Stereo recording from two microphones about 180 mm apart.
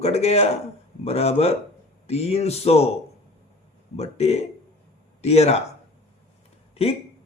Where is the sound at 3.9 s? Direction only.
35° left (ahead or behind).